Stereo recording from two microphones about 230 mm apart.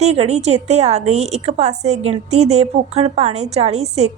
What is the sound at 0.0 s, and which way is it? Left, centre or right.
A woman's voice, right.